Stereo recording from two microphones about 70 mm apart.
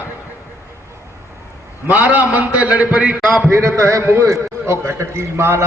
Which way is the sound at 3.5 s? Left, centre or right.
Right.